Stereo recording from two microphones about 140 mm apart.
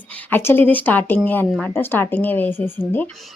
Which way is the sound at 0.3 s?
15° left (ahead or behind).